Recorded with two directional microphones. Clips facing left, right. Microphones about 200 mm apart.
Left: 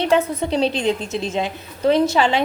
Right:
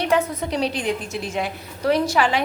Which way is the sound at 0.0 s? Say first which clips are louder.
Left 3 dB; 30° left (ahead or behind).